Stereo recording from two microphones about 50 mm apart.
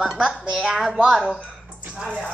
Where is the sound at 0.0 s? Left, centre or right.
Centre.